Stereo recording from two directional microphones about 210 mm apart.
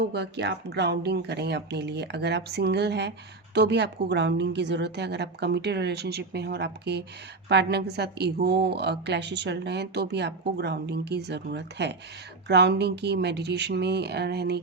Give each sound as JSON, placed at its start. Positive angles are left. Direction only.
{"t": 0.1, "sound": "a woman's voice", "side_deg": -55}